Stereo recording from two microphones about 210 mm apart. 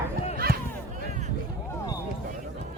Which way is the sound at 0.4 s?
45° right (ahead or behind).